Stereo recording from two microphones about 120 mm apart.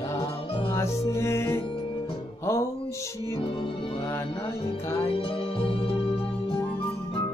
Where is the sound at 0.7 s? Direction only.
25° left (ahead or behind).